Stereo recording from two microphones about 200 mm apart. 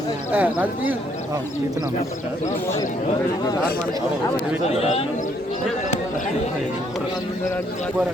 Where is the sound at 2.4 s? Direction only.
15° left (ahead or behind).